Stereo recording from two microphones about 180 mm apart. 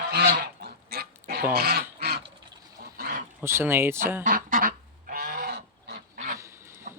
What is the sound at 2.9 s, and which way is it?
Dog, 50° right (ahead or behind).